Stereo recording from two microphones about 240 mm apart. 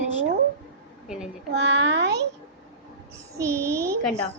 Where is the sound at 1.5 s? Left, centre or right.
Right.